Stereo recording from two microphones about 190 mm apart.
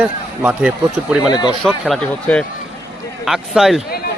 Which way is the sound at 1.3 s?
20° left (ahead or behind).